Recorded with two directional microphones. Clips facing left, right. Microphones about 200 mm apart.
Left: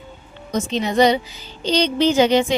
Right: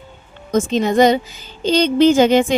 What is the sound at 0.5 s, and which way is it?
A woman's voice, 50° right (ahead or behind).